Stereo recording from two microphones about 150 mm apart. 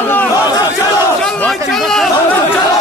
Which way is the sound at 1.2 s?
5° left (ahead or behind).